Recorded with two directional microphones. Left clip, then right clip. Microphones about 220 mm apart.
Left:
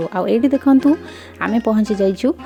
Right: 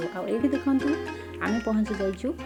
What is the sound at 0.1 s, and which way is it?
Speech, 40° left (ahead or behind).